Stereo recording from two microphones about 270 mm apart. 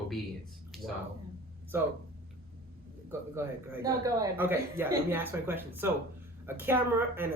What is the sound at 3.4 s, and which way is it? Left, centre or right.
Speech, centre.